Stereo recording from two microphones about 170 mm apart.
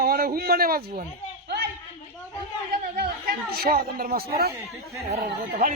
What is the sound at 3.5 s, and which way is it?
A man's voice, 65° right (ahead or behind).